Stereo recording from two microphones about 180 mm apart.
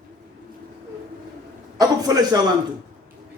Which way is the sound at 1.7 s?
20° right (ahead or behind).